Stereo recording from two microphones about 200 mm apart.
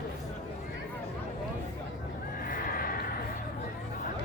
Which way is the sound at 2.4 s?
45° left (ahead or behind).